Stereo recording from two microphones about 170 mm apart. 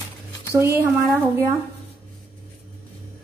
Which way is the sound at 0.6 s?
15° right (ahead or behind).